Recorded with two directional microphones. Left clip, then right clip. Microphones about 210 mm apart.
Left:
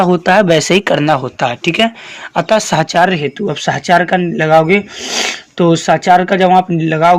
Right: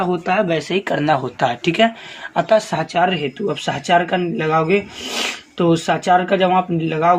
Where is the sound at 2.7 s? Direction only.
55° left (ahead or behind).